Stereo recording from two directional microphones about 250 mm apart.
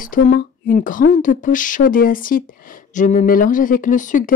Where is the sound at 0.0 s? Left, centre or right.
Left.